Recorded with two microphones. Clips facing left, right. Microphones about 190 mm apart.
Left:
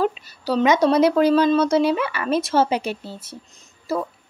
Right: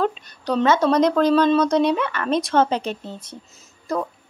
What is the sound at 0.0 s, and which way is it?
Speech, 5° left (ahead or behind).